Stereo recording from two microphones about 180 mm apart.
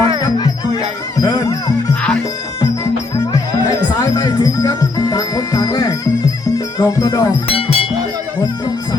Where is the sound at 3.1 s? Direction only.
20° left (ahead or behind).